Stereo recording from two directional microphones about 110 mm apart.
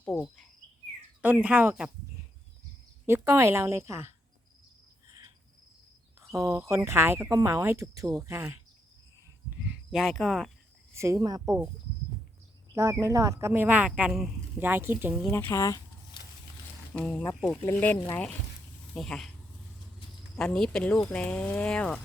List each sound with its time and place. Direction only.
1.2 s speech: 15° right (ahead or behind)
3.1 s speech: 25° right (ahead or behind)
6.5 s speech: 25° right (ahead or behind)
9.6 s speech: 5° right (ahead or behind)
10.9 s speech: 25° right (ahead or behind)
12.7 s speech: 25° right (ahead or behind)
14.1 s speech: centre (ahead or behind)
14.6 s speech: 20° right (ahead or behind)
15.3 s speech: 20° left (ahead or behind)
16.9 s speech: 10° left (ahead or behind)
18.9 s speech: 5° left (ahead or behind)
20.3 s speech: 5° left (ahead or behind)